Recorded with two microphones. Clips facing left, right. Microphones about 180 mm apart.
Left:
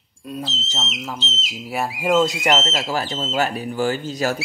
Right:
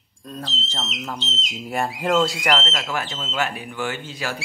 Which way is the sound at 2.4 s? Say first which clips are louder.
Left 3 dB; 25° left (ahead or behind).